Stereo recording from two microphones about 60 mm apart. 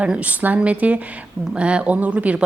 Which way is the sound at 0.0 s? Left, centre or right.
Right.